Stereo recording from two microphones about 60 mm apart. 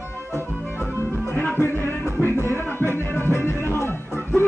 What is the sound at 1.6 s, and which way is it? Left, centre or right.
Music, left.